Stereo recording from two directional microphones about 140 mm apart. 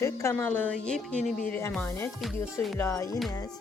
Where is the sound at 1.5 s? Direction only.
15° left (ahead or behind).